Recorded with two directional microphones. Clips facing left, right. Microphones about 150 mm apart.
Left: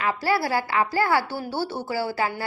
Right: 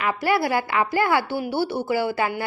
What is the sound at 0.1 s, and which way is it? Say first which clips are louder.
A woman's voice: right 2 dB; 20° right (ahead or behind).